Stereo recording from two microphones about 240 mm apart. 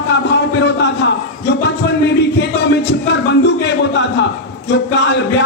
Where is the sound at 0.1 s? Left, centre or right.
Left.